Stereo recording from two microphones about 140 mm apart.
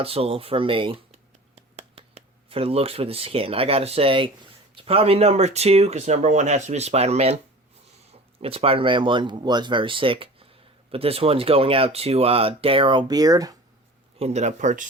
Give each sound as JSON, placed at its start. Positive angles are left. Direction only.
{"t": 0.0, "sound": "speech", "side_deg": -45}
{"t": 1.1, "sound": "a sound", "side_deg": -50}
{"t": 4.7, "sound": "speech", "side_deg": -40}
{"t": 14.2, "sound": "speech", "side_deg": -50}